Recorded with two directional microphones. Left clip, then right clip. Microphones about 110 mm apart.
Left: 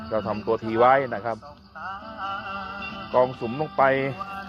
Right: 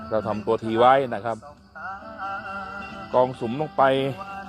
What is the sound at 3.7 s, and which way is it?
Speech, 90° right.